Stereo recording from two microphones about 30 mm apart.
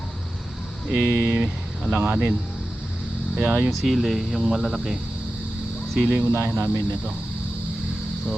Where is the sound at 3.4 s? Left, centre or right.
Right.